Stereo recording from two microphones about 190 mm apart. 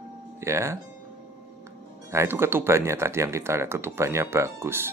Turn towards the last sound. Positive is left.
turn(degrees=-10)  # may be behind; listen again after turning